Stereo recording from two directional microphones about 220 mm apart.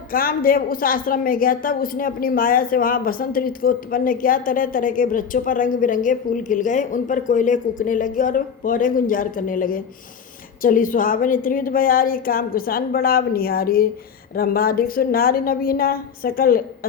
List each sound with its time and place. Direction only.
0.1 s a woman's voice: 40° left (ahead or behind)